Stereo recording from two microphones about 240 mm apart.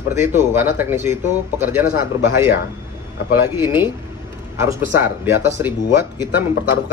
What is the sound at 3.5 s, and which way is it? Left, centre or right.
Speech, centre.